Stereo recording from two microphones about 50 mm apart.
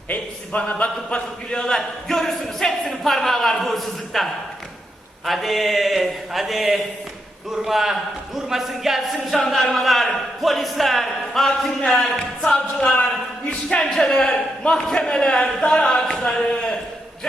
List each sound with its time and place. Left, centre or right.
0.1 s a man's voice: left
13.9 s a man's voice: centre
14.2 s a man's voice: centre